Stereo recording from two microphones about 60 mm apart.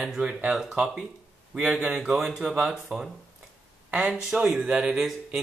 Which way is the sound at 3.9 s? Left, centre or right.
Right.